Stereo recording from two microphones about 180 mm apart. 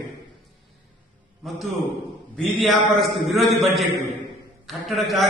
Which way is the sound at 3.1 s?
Centre (ahead or behind).